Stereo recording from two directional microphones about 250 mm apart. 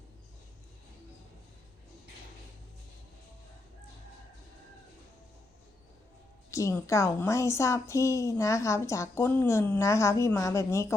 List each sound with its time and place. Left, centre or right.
6.5 s a woman's voice: centre